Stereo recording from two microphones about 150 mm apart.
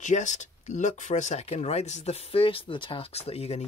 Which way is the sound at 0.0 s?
55° left (ahead or behind).